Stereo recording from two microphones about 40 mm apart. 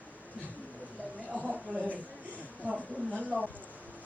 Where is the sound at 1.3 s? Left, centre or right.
Right.